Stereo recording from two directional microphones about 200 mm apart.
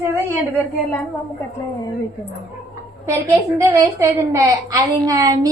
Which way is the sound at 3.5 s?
15° right (ahead or behind).